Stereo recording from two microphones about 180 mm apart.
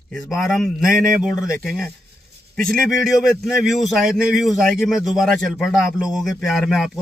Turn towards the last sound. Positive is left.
turn(degrees=-5)  # may be behind; listen again after turning